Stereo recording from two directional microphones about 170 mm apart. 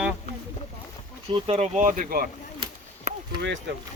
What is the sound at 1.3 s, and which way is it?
Speech, 35° right (ahead or behind).